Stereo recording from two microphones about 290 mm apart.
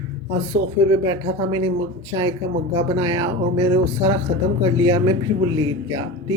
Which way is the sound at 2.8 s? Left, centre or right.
Centre.